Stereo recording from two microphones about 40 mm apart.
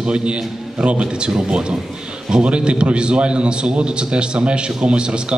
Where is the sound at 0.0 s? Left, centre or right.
Right.